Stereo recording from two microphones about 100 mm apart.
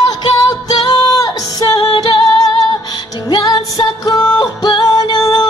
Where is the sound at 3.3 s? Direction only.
45° left (ahead or behind).